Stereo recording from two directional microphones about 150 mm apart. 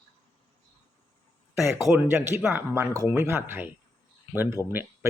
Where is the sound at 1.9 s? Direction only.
15° right (ahead or behind).